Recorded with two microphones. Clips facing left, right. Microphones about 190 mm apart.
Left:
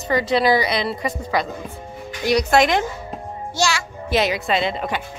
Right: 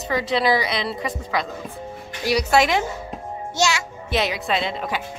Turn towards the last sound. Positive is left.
turn(degrees=0)  # may be behind; listen again after turning